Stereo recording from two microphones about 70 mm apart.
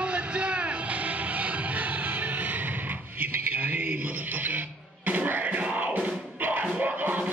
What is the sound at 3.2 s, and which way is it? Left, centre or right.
Music, right.